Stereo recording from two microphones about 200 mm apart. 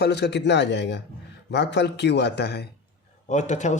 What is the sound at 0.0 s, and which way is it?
Speech, 55° left (ahead or behind).